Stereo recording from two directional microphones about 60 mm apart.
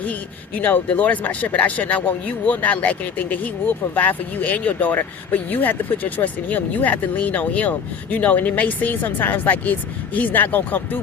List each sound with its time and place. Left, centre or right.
0.0 s speech: left